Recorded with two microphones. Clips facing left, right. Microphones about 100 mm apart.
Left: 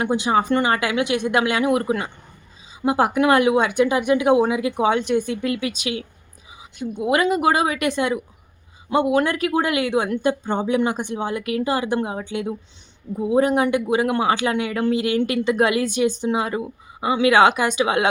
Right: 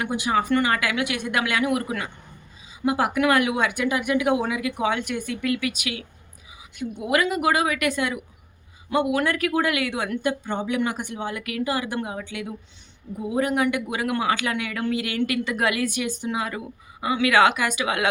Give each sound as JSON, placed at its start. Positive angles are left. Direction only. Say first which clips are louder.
{"t": 0.0, "sound": "speech", "louder": "left 4 dB", "side_deg": 30}